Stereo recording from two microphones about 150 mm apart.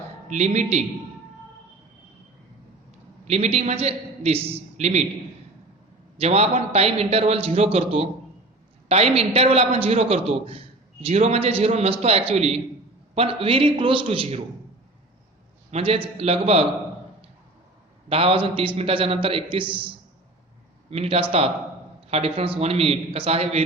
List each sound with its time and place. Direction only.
0.3 s a man's voice: 55° right (ahead or behind)
3.2 s a man's voice: 45° right (ahead or behind)
6.1 s a man's voice: 45° right (ahead or behind)
15.7 s a man's voice: 45° right (ahead or behind)
18.1 s a man's voice: 40° right (ahead or behind)
20.9 s a man's voice: 40° right (ahead or behind)